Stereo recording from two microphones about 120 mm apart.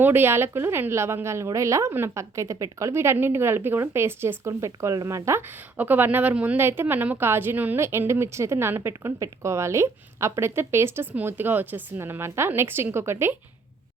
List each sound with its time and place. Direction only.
0.0 s a woman's voice: 20° right (ahead or behind)